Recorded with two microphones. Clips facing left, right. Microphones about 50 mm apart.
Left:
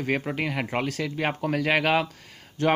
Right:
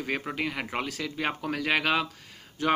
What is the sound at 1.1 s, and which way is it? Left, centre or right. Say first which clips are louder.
Speech: left 3 dB; left.